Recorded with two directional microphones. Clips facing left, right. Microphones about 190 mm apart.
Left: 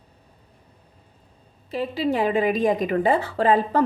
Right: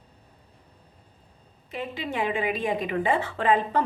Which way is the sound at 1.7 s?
35° left (ahead or behind).